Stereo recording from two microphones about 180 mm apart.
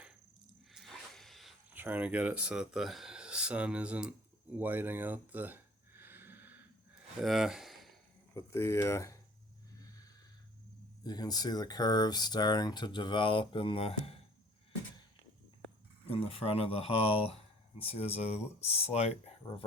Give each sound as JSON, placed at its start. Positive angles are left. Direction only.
{"t": 0.7, "sound": "a sound", "side_deg": 0}
{"t": 1.7, "sound": "speech", "side_deg": -10}
{"t": 4.5, "sound": "a sound", "side_deg": -10}
{"t": 7.2, "sound": "speech", "side_deg": 0}
{"t": 8.3, "sound": "speech", "side_deg": 15}
{"t": 11.0, "sound": "speech", "side_deg": 20}
{"t": 16.0, "sound": "speech", "side_deg": 30}